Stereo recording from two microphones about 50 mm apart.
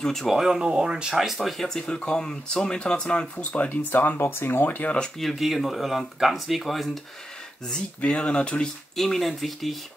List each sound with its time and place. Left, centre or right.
0.0 s speech: centre
0.3 s speech: centre
1.9 s speech: centre
3.6 s speech: left
5.2 s speech: centre
8.0 s speech: left
8.9 s speech: centre